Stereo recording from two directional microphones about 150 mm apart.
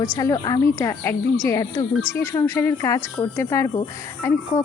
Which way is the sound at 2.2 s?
15° left (ahead or behind).